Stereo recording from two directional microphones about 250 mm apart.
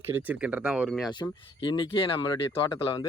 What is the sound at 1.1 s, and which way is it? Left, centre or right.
Speech, centre.